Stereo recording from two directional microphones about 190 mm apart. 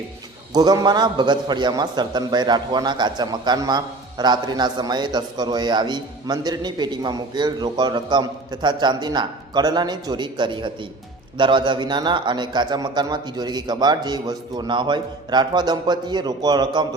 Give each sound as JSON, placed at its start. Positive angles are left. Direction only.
{"t": 0.5, "sound": "a man's voice", "side_deg": -20}